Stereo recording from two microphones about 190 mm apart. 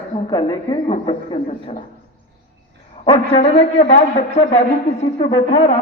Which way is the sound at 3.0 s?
30° left (ahead or behind).